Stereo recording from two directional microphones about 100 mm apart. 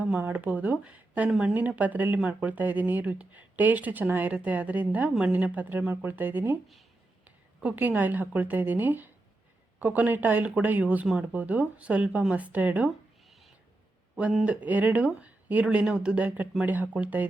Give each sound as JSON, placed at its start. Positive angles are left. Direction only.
{"t": 0.0, "sound": "speech", "side_deg": -15}
{"t": 7.6, "sound": "speech", "side_deg": -15}
{"t": 13.2, "sound": "owl", "side_deg": 0}
{"t": 14.4, "sound": "speech", "side_deg": -15}